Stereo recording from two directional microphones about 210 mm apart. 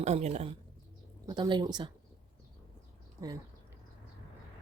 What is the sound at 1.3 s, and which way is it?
Speech, 20° right (ahead or behind).